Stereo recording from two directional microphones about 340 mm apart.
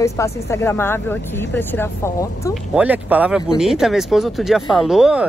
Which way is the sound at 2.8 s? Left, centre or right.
Centre.